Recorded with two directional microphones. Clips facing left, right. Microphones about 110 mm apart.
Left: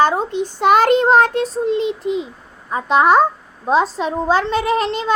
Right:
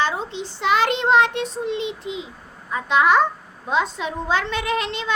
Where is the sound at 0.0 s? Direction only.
45° left (ahead or behind).